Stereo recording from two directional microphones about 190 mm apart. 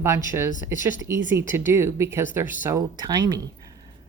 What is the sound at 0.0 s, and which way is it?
Speech, 15° right (ahead or behind).